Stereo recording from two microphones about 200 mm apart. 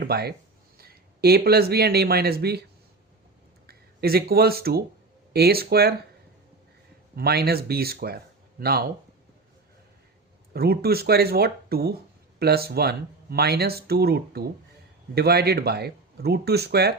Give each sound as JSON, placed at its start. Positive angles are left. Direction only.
{"t": 0.0, "sound": "speech", "side_deg": -55}
{"t": 3.7, "sound": "speech", "side_deg": -50}
{"t": 7.2, "sound": "speech", "side_deg": -50}
{"t": 10.5, "sound": "speech", "side_deg": -50}